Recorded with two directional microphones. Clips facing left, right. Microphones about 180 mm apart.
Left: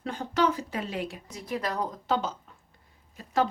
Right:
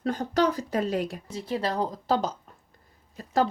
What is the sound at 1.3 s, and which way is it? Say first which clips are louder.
A woman's voice: right 3 dB; 30° right (ahead or behind).